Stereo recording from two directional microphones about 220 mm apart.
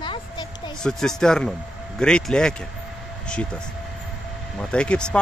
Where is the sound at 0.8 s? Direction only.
5° left (ahead or behind).